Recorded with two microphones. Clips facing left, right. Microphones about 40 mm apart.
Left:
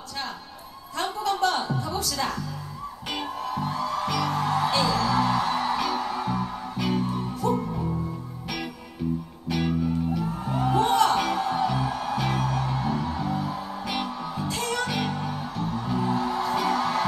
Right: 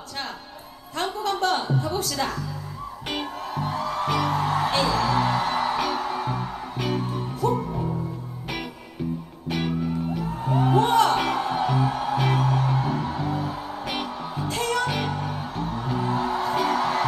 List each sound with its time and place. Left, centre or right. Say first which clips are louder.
0.9 s a sound: right 1 dB; right
1.4 s music: right 3 dB; right
10.1 s music: right 2 dB; right